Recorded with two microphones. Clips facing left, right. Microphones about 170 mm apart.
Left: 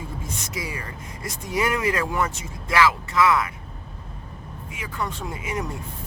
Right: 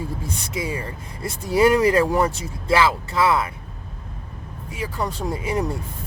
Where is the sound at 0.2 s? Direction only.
30° right (ahead or behind).